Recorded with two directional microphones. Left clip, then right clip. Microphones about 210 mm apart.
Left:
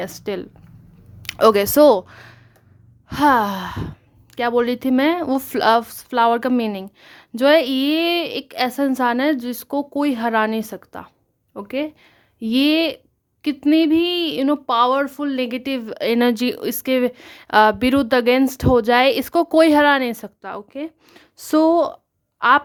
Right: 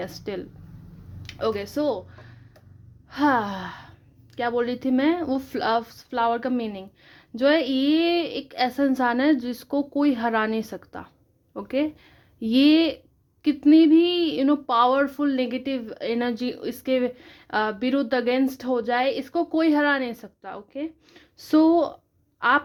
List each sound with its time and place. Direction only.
0.0 s speech: 20° left (ahead or behind)
1.2 s speech: 45° left (ahead or behind)
3.1 s speech: 25° left (ahead or behind)